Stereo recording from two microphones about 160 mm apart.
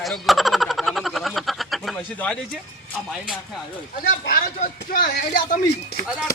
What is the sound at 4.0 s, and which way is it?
Speech, 65° left (ahead or behind).